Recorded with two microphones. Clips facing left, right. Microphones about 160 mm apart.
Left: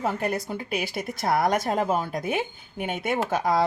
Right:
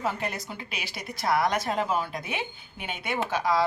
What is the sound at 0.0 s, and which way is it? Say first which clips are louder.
Speech: left 4 dB; 50° left (ahead or behind).